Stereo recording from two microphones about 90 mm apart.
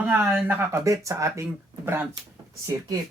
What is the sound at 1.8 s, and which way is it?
Speech, 25° right (ahead or behind).